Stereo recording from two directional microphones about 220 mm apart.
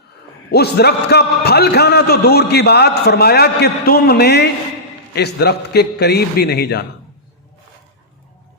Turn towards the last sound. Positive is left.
turn(degrees=45)  # may be behind; listen again after turning